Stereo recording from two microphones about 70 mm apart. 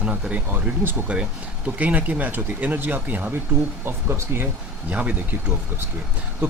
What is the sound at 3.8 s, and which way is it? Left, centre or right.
Speech, right.